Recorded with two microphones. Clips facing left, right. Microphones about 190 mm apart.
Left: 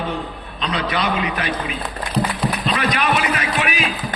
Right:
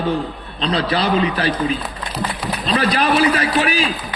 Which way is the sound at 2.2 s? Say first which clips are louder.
Left 4 dB; 60° left (ahead or behind).